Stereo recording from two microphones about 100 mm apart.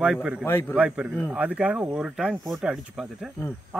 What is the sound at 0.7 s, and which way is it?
Speech, 15° right (ahead or behind).